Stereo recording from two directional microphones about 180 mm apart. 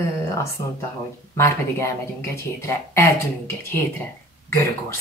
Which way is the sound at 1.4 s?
15° left (ahead or behind).